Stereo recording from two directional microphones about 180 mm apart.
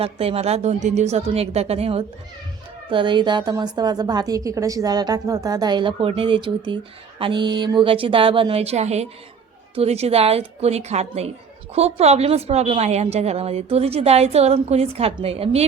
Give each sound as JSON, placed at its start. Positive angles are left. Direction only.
{"t": 0.0, "sound": "a woman's voice", "side_deg": -35}